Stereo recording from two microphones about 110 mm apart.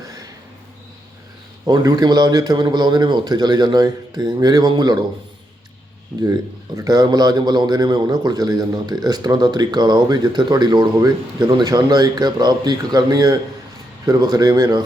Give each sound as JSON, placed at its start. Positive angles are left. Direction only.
{"t": 1.6, "sound": "a man's voice", "side_deg": -35}
{"t": 6.7, "sound": "a man's voice", "side_deg": -35}